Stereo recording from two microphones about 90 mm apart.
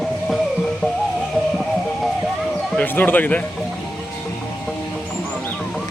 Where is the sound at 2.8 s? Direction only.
20° left (ahead or behind).